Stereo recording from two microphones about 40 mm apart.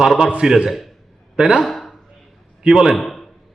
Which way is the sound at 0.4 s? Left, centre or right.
Centre.